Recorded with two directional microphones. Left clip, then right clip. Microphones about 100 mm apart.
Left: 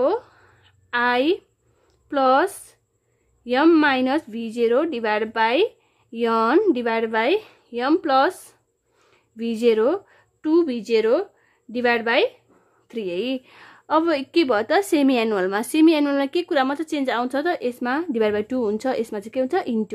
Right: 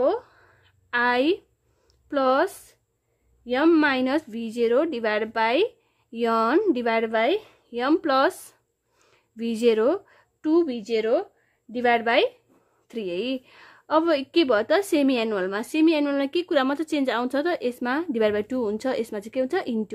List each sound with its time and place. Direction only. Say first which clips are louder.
0.0 s a sound: left 2 dB; 20° left (ahead or behind)
2.0 s speech: left 3 dB; 20° left (ahead or behind)
3.8 s speech: left 3 dB; 15° left (ahead or behind)
7.2 s speech: left 2 dB; 25° left (ahead or behind)
7.7 s speech: left 3 dB; 15° left (ahead or behind)
9.1 s a sound: left 2 dB; 10° left (ahead or behind)
10.5 s speech: left 3 dB; 40° left (ahead or behind)
11.7 s speech: left 1 dB; 20° left (ahead or behind)
16.2 s speech: left 2 dB; 5° left (ahead or behind)